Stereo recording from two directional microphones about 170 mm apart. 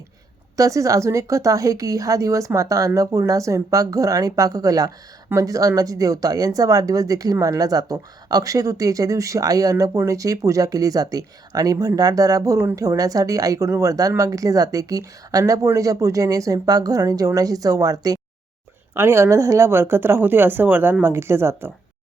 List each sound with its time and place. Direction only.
0.5 s speech: 20° right (ahead or behind)